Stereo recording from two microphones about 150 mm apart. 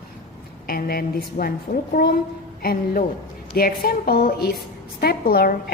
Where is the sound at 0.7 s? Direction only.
75° left (ahead or behind).